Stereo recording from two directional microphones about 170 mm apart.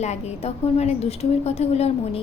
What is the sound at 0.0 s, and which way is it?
A woman's voice, 40° left (ahead or behind).